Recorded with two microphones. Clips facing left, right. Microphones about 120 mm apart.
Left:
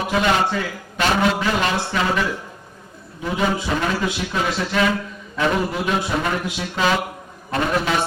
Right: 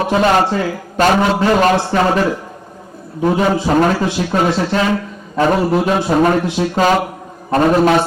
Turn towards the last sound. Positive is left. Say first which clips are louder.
# right 9 dB
turn(degrees=-45)  # may be behind; listen again after turning